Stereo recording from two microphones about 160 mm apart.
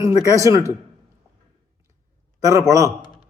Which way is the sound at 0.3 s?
20° right (ahead or behind).